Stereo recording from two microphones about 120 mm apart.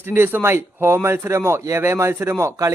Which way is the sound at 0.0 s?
20° right (ahead or behind).